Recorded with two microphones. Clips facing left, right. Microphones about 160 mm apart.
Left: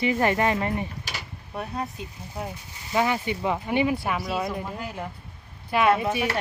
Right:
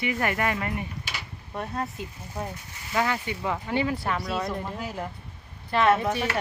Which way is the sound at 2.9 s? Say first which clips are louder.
Left 3 dB; 20° left (ahead or behind).